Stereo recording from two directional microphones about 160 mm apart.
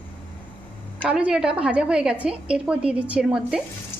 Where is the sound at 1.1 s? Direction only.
5° right (ahead or behind).